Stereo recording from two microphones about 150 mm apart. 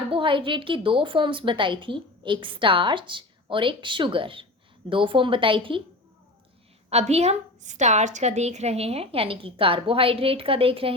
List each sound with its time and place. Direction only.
0.1 s a woman's voice: 35° right (ahead or behind)
6.9 s a woman's voice: 45° right (ahead or behind)